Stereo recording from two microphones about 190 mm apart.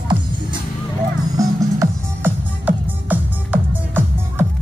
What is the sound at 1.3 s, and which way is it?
Music, 15° right (ahead or behind).